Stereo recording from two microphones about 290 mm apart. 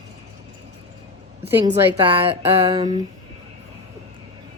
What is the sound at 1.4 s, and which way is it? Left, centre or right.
Speech, centre.